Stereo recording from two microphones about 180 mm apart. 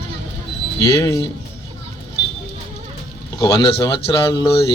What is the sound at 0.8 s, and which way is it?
Speech, 15° left (ahead or behind).